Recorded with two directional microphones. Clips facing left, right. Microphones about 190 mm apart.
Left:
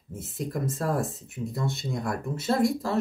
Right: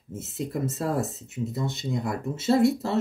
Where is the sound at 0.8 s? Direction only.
25° right (ahead or behind).